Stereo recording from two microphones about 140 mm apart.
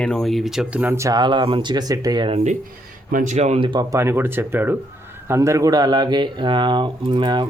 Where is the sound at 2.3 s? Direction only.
55° right (ahead or behind).